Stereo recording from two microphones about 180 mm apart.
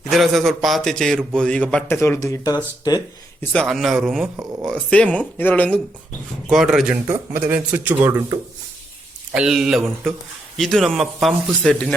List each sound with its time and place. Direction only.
0.1 s a man's voice: centre (ahead or behind); by 3.0 s 20° left (ahead or behind)
3.5 s a man's voice: 5° left (ahead or behind)